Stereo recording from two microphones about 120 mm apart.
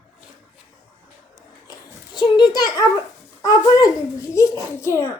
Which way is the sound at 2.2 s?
40° left (ahead or behind).